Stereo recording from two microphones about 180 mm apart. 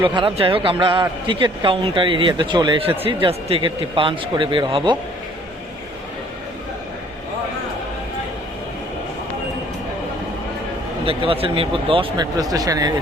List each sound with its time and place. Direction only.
0.2 s a man's voice: 30° right (ahead or behind)
11.0 s a man's voice: 30° right (ahead or behind)